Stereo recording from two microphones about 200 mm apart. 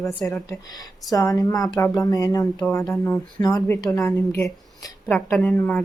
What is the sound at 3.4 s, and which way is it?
Speech, 20° left (ahead or behind).